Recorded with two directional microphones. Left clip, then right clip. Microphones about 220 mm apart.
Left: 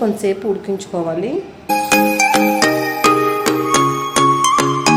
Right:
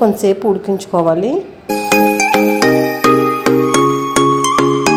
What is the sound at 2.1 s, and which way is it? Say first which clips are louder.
Music: right 1 dB; centre (ahead or behind).